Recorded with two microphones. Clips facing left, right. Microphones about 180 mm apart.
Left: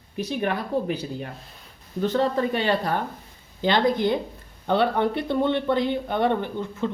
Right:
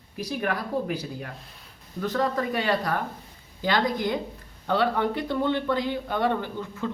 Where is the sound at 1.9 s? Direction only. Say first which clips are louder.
Left 4 dB; 30° left (ahead or behind).